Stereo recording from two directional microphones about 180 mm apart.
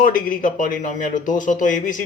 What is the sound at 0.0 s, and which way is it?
Speech, 50° left (ahead or behind).